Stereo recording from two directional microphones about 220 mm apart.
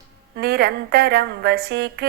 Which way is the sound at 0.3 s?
45° right (ahead or behind).